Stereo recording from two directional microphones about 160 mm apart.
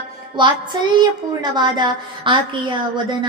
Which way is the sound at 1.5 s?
30° right (ahead or behind).